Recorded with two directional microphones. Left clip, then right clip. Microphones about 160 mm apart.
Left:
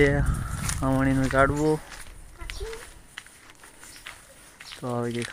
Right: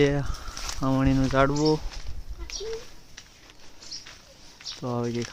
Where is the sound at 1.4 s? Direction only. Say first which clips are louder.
Left 2 dB; 20° right (ahead or behind).